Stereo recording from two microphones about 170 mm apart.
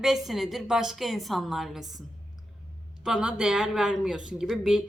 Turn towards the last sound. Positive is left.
turn(degrees=-5)  # may be behind; listen again after turning